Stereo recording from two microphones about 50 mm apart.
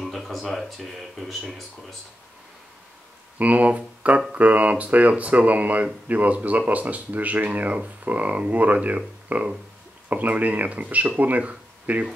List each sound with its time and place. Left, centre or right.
0.0 s speech: centre
3.3 s speech: right